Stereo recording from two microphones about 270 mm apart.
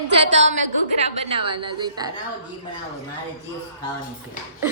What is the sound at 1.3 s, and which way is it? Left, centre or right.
Speech, centre.